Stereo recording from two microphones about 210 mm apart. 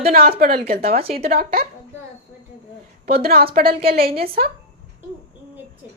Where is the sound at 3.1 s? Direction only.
45° right (ahead or behind).